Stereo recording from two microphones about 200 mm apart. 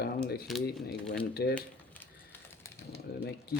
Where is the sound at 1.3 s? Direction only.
55° left (ahead or behind).